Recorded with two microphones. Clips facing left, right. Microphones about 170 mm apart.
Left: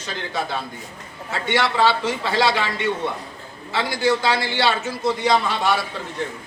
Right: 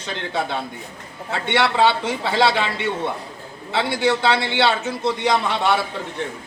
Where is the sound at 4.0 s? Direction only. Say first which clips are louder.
Even; 25° right (ahead or behind).